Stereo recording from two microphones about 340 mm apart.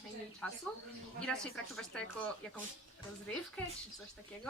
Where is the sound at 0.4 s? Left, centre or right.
Centre.